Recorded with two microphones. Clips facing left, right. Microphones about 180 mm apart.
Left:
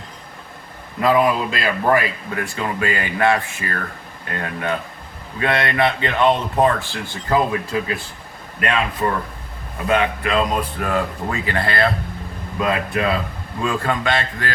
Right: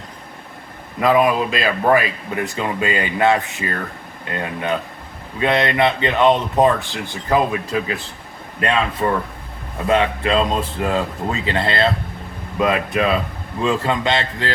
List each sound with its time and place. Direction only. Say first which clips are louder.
1.0 s speech: right 1 dB; 20° right (ahead or behind)